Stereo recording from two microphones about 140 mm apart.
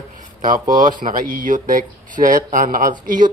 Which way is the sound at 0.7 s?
75° right (ahead or behind).